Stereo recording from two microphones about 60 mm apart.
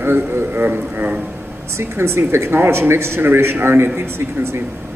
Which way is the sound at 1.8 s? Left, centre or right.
Right.